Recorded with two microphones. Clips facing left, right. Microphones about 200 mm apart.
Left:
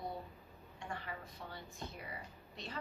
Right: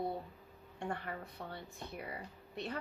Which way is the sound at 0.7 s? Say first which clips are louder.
Right 5 dB; 60° right (ahead or behind).